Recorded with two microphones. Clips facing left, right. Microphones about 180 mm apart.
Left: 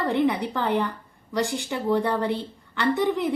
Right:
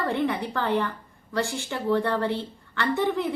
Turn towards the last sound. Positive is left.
turn(degrees=15)  # may be behind; listen again after turning